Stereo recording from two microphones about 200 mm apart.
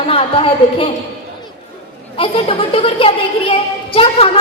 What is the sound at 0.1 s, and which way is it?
Speech, 25° left (ahead or behind).